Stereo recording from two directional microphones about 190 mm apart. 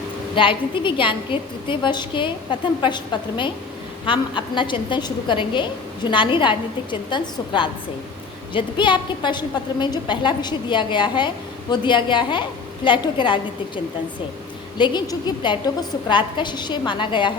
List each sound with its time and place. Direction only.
0.3 s a woman's voice: 25° left (ahead or behind)
14.8 s a woman's voice: 25° left (ahead or behind)